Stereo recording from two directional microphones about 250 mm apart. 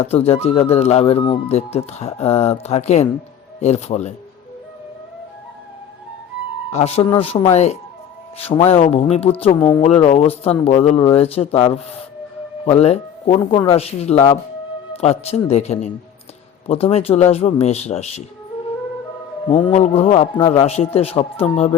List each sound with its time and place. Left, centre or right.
0.0 s speech: left
6.7 s speech: left
19.5 s speech: left